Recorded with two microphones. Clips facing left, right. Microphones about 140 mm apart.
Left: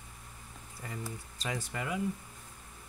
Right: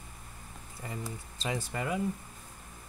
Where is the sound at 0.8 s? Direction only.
20° right (ahead or behind).